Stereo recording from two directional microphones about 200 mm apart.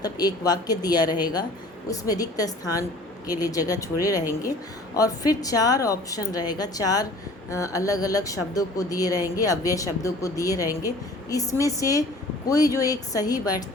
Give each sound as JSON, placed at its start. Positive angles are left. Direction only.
{"t": 0.0, "sound": "a woman's voice", "side_deg": 20}